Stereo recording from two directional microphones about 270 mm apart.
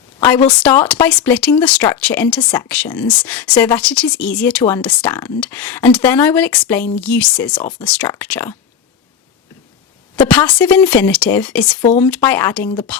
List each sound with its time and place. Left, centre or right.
0.6 s a woman's voice: centre
10.2 s a woman's voice: centre
11.7 s speech: left
11.9 s speech: centre